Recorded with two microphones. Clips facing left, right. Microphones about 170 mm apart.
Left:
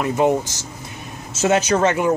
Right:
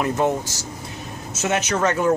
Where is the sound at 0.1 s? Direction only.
15° left (ahead or behind).